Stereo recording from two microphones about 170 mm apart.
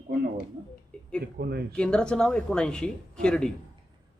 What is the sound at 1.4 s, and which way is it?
Speech, 65° right (ahead or behind).